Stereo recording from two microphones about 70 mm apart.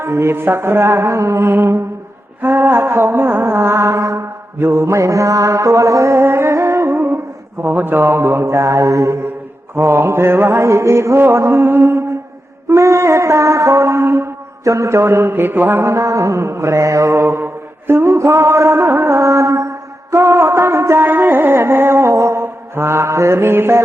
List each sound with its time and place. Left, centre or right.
0.0 s music: right
12.6 s mantra: right